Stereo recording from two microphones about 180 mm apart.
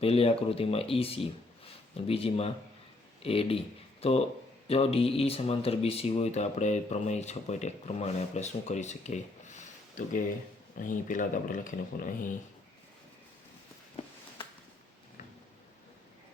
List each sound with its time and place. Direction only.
0.0 s speech: 35° left (ahead or behind)
4.7 s speech: 35° left (ahead or behind)